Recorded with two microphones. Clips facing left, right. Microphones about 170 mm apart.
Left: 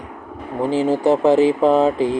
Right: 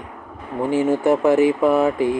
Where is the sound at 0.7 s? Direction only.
30° left (ahead or behind).